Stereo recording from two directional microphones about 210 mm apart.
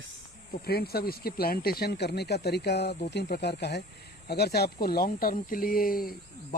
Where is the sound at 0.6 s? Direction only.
50° left (ahead or behind).